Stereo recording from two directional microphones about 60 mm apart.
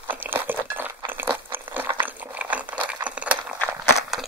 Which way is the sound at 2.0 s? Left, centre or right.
Right.